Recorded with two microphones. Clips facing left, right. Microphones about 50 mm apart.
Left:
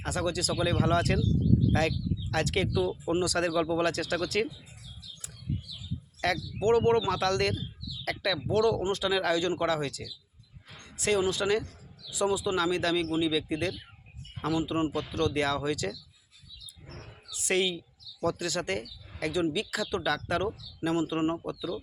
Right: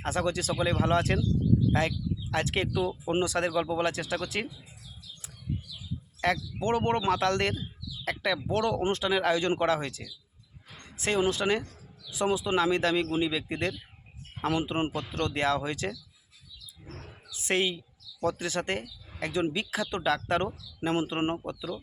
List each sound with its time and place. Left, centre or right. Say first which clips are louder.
0.0 s speech: right 2 dB; right
2.3 s speech: left 1 dB; right
3.3 s speech: left 1 dB; right
6.2 s speech: left 1 dB; right
14.4 s speech: even; right
15.2 s speech: even; right
17.3 s speech: even; right